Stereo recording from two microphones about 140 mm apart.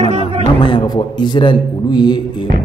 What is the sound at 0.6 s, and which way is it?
A man's voice, 35° left (ahead or behind).